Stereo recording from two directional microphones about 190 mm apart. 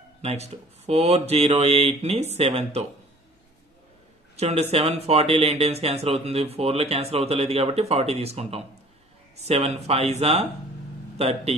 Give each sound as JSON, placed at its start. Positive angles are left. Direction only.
{"t": 0.2, "sound": "speech", "side_deg": -35}
{"t": 4.4, "sound": "speech", "side_deg": -35}